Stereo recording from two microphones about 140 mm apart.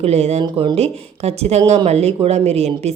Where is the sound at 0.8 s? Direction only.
50° right (ahead or behind).